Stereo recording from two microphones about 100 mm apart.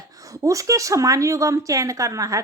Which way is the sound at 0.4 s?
35° right (ahead or behind).